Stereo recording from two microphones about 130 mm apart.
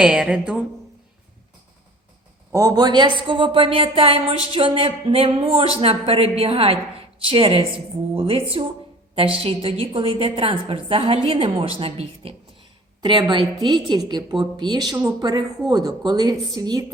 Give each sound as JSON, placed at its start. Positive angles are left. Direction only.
{"t": 0.0, "sound": "a woman's voice", "side_deg": -5}
{"t": 2.5, "sound": "a woman's voice", "side_deg": -25}